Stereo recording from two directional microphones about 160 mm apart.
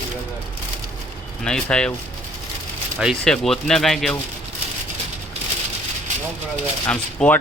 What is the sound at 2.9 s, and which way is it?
Speech, centre (ahead or behind).